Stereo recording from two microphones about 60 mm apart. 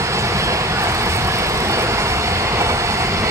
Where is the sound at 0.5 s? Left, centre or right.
Right.